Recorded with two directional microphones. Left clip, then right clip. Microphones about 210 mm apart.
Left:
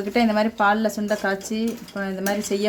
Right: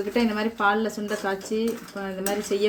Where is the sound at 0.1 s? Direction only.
50° left (ahead or behind).